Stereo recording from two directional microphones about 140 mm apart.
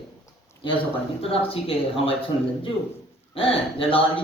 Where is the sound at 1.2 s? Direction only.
45° left (ahead or behind).